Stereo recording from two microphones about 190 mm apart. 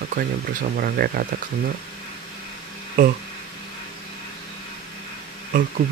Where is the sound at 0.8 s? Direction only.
50° right (ahead or behind).